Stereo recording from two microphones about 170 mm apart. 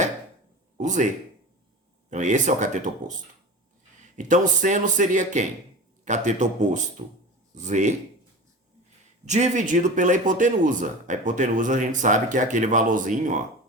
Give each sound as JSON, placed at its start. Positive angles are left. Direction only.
{"t": 0.8, "sound": "speech", "side_deg": -45}
{"t": 2.0, "sound": "speech", "side_deg": -45}
{"t": 4.2, "sound": "speech", "side_deg": -45}
{"t": 9.2, "sound": "speech", "side_deg": -45}